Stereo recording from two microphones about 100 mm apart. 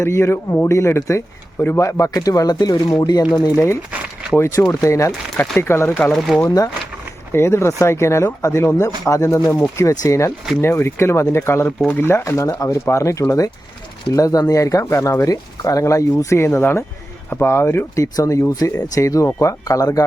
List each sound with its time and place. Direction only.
0.0 s speech: 25° left (ahead or behind)
4.4 s speech: 25° left (ahead or behind)
6.1 s speech: centre (ahead or behind)
7.3 s speech: 25° left (ahead or behind)
11.8 s speech: 15° left (ahead or behind)
12.0 s speech: 25° left (ahead or behind)